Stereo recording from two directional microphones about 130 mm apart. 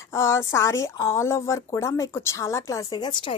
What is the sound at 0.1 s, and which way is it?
Speech, 20° left (ahead or behind).